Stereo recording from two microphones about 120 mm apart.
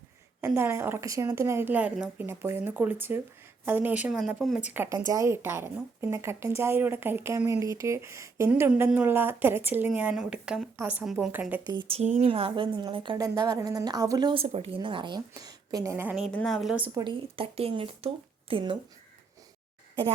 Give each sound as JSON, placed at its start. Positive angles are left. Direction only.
{"t": 0.4, "sound": "a woman's voice", "side_deg": -20}
{"t": 4.9, "sound": "a woman's voice", "side_deg": -30}
{"t": 11.0, "sound": "a woman's voice", "side_deg": -5}
{"t": 11.3, "sound": "a woman's voice", "side_deg": -15}
{"t": 11.7, "sound": "speech", "side_deg": -40}
{"t": 11.9, "sound": "speech", "side_deg": -60}
{"t": 13.1, "sound": "speech", "side_deg": -30}
{"t": 14.3, "sound": "speech", "side_deg": -60}
{"t": 14.8, "sound": "speech", "side_deg": -40}
{"t": 15.3, "sound": "a woman's voice", "side_deg": -30}
{"t": 16.0, "sound": "a woman's voice", "side_deg": -5}
{"t": 17.0, "sound": "speech", "side_deg": -45}